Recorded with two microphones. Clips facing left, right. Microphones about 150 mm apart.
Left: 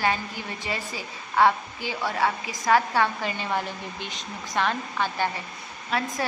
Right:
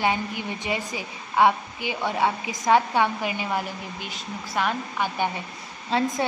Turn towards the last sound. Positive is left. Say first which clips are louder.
# right 4 dB
turn(degrees=-25)  # may be behind; listen again after turning